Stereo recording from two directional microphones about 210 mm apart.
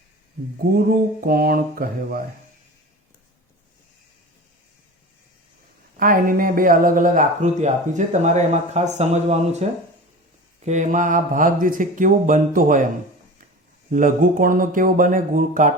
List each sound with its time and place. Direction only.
0.9 s mantra: 45° right (ahead or behind)
6.0 s speech: 40° right (ahead or behind)
13.9 s speech: 40° right (ahead or behind)